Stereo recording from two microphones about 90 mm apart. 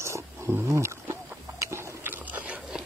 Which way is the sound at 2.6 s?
5° right (ahead or behind).